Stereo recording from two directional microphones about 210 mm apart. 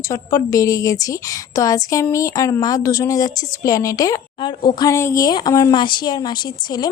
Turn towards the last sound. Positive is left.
turn(degrees=20)  # may be behind; listen again after turning